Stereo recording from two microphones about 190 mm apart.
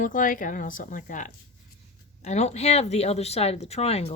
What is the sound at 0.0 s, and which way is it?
A woman's voice, 45° left (ahead or behind).